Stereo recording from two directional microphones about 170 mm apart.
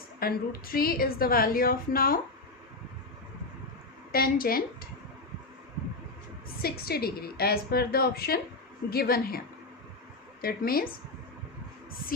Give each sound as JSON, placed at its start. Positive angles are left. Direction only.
{"t": 0.2, "sound": "a woman's voice", "side_deg": 60}
{"t": 4.1, "sound": "a woman's voice", "side_deg": 60}
{"t": 6.6, "sound": "a woman's voice", "side_deg": 65}
{"t": 10.4, "sound": "a woman's voice", "side_deg": 60}